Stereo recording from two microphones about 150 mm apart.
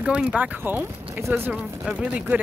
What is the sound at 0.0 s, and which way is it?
Speech, 5° right (ahead or behind).